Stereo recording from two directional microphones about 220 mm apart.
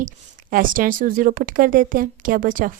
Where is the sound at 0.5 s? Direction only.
40° right (ahead or behind).